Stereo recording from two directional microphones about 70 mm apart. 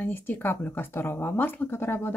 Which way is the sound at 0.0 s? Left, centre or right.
Left.